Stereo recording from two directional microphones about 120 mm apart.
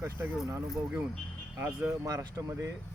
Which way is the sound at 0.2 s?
20° right (ahead or behind).